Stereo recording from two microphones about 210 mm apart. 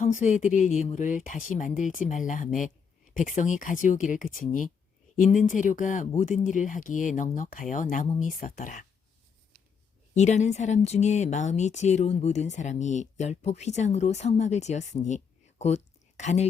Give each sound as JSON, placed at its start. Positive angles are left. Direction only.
{"t": 0.0, "sound": "speech", "side_deg": 35}
{"t": 10.2, "sound": "speech", "side_deg": 35}